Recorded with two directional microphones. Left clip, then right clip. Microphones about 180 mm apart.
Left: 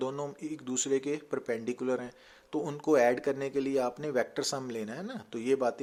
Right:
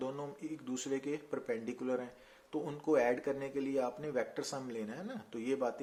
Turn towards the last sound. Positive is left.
turn(degrees=45)  # may be behind; listen again after turning